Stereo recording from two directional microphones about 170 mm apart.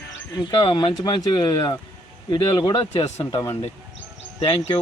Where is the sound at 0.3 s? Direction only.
25° left (ahead or behind).